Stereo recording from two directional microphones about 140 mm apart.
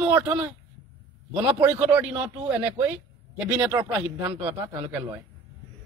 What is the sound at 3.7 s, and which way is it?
Speech, 25° right (ahead or behind).